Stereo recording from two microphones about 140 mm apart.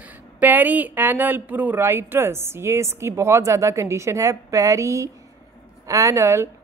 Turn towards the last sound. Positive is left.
turn(degrees=-20)  # may be behind; listen again after turning